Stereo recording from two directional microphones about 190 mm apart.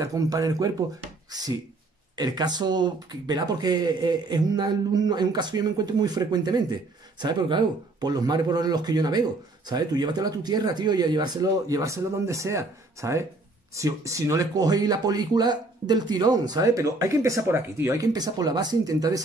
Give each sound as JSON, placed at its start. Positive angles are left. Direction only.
{"t": 0.0, "sound": "speech", "side_deg": -20}
{"t": 2.1, "sound": "speech", "side_deg": -20}